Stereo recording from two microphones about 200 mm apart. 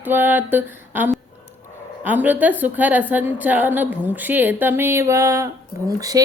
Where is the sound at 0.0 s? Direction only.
10° right (ahead or behind).